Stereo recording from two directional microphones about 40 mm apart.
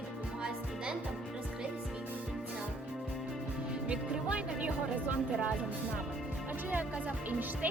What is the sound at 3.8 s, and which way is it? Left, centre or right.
Music, right.